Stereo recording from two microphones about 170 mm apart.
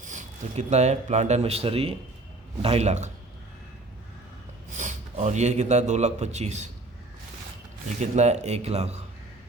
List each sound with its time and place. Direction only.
0.0 s a man's voice: 45° right (ahead or behind)
4.8 s speech: 45° right (ahead or behind)
7.9 s speech: 40° right (ahead or behind)